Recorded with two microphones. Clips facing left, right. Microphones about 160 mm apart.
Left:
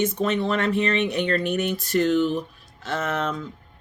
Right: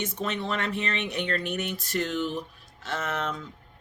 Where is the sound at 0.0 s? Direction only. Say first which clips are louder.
Left 8 dB; 45° left (ahead or behind).